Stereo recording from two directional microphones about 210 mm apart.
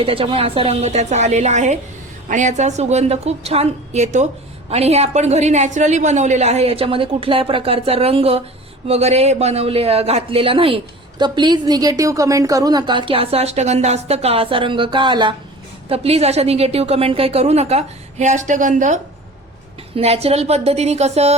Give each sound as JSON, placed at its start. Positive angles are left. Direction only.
{"t": 0.0, "sound": "a woman's voice", "side_deg": -25}
{"t": 20.0, "sound": "a woman's voice", "side_deg": -30}